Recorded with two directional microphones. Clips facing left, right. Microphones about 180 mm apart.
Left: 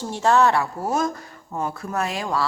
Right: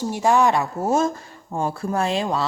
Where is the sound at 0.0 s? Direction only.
10° right (ahead or behind).